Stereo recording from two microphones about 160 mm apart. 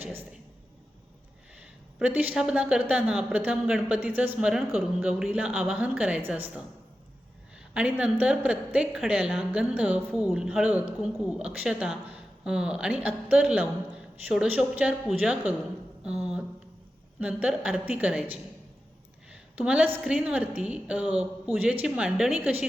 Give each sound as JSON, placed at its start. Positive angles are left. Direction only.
{"t": 2.0, "sound": "a woman's voice", "side_deg": -10}
{"t": 7.7, "sound": "a woman's voice", "side_deg": -5}
{"t": 16.0, "sound": "a sound", "side_deg": -5}
{"t": 17.2, "sound": "a woman's voice", "side_deg": -10}
{"t": 19.3, "sound": "a woman's voice", "side_deg": -5}